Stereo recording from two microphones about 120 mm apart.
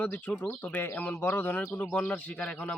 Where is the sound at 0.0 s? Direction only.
15° left (ahead or behind).